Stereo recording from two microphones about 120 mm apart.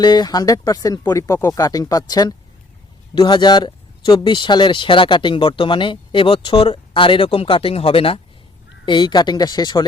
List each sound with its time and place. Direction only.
0.0 s speech: 35° left (ahead or behind)
8.9 s speech: 40° left (ahead or behind)